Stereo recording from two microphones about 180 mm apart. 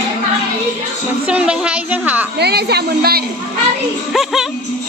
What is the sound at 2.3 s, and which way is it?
Speech, 65° right (ahead or behind).